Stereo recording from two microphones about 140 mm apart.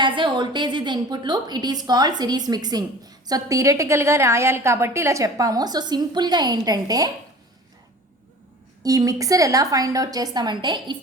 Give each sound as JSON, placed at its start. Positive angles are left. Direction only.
{"t": 0.0, "sound": "a woman's voice", "side_deg": -35}
{"t": 8.8, "sound": "a woman's voice", "side_deg": -25}